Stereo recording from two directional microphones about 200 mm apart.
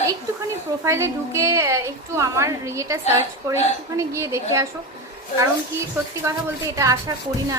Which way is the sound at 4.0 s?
15° right (ahead or behind).